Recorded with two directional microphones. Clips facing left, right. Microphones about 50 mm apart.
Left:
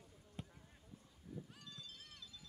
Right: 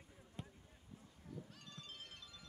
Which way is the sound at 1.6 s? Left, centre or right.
Right.